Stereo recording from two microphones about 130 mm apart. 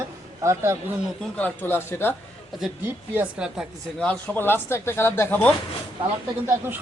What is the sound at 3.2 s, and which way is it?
Speech, 5° right (ahead or behind).